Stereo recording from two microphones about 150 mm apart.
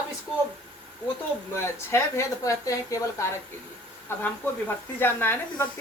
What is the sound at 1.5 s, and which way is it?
Speech, 20° left (ahead or behind).